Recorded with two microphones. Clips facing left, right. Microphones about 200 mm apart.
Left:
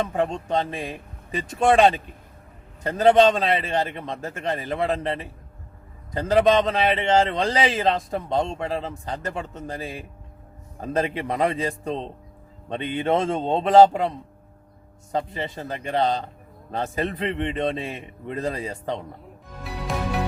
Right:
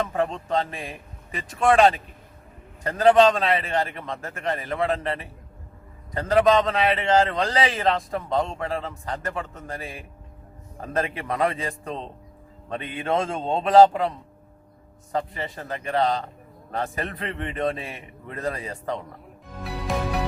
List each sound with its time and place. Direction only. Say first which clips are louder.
0.1 s a man's voice: left 1 dB; 15° left (ahead or behind)
15.1 s a man's voice: left 1 dB; 25° left (ahead or behind)